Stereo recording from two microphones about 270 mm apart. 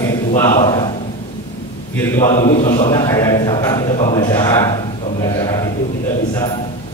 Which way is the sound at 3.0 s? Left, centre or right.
Centre.